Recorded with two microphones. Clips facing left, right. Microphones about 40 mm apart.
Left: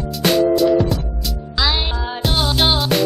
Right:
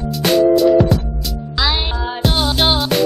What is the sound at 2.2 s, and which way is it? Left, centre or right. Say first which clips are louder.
Music: right 1 dB; centre.